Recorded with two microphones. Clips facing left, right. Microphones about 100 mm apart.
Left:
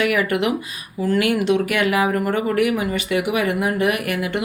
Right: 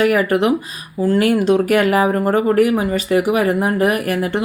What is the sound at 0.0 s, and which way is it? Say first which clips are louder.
Speech: right 5 dB; 40° right (ahead or behind).